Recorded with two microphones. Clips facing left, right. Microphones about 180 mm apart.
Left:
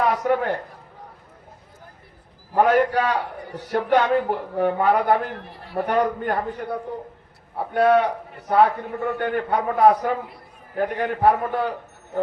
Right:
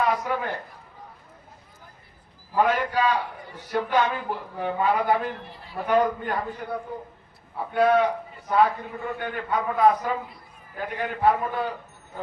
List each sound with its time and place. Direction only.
0.0 s speech: 60° left (ahead or behind)
2.6 s a man's voice: 60° left (ahead or behind)
7.7 s a man's voice: 60° left (ahead or behind)